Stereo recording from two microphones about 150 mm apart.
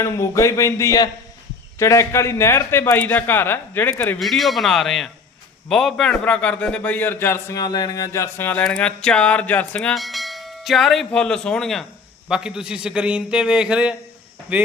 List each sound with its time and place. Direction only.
0.0 s a man's voice: 20° left (ahead or behind)
4.2 s a man's voice: centre (ahead or behind)